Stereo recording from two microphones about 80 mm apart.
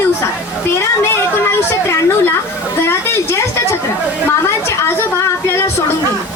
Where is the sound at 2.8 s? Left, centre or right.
Left.